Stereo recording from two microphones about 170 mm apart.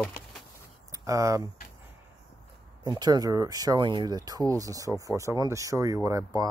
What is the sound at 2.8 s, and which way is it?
Speech, 25° right (ahead or behind).